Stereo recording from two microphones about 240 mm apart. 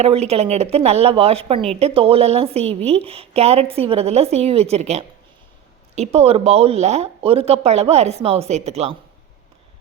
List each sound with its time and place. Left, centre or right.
0.0 s speech: right